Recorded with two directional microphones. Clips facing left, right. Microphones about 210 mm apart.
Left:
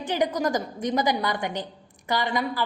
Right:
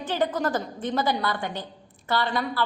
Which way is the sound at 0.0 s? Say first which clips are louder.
Left 1 dB; 15° left (ahead or behind).